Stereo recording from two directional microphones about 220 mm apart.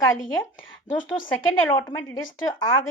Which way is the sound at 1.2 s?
10° left (ahead or behind).